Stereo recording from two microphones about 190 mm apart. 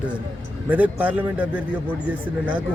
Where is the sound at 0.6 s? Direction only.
10° right (ahead or behind).